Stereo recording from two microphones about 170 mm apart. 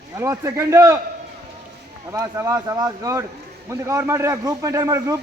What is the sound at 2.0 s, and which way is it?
A man's voice, 15° right (ahead or behind).